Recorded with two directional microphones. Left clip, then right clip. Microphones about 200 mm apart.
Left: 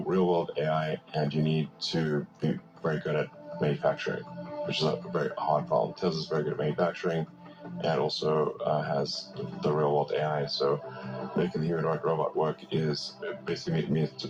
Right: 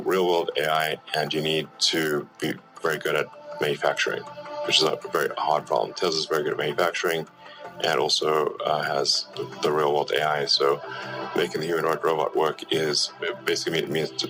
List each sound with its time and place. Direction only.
0.1 s speech: 25° right (ahead or behind)